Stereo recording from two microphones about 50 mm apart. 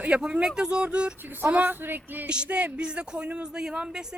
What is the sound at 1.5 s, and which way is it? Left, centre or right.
Speech, right.